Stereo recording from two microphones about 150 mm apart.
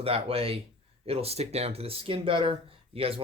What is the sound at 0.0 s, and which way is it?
Speech, 40° right (ahead or behind).